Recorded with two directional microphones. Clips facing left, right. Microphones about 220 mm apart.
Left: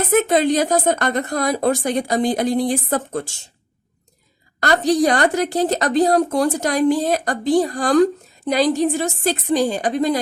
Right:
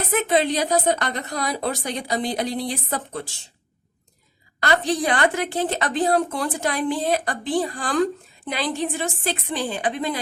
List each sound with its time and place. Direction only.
0.1 s a woman's voice: 45° left (ahead or behind)
4.6 s a woman's voice: 40° left (ahead or behind)